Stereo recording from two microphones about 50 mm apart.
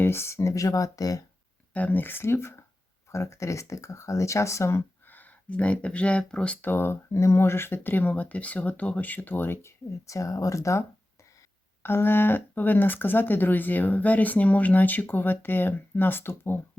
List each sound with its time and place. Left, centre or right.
0.0 s speech: left
1.7 s speech: left
2.2 s speech: left
3.1 s speech: left
5.0 s a sound: left
5.5 s speech: left
6.6 s speech: left
7.1 s speech: left
9.6 s speech: left
11.8 s speech: left